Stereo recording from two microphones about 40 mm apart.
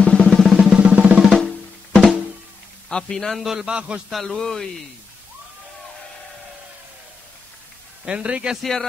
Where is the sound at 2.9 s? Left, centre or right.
Centre.